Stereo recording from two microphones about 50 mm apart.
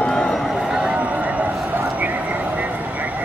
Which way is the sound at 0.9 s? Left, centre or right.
Right.